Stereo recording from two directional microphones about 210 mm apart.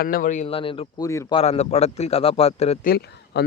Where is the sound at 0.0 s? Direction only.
40° left (ahead or behind); by 1.4 s 15° left (ahead or behind).